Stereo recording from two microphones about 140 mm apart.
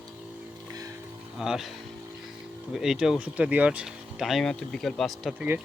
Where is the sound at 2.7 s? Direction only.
5° right (ahead or behind).